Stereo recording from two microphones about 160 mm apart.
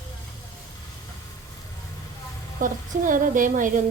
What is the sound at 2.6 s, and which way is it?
Speech, 55° right (ahead or behind).